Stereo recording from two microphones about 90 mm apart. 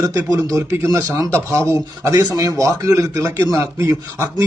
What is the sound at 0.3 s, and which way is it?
Speech, 35° right (ahead or behind).